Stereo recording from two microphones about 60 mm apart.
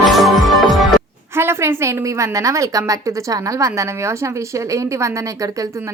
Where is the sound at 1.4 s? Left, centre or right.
Right.